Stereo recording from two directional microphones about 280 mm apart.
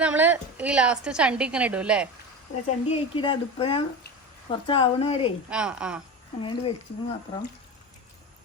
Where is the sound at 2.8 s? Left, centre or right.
Centre.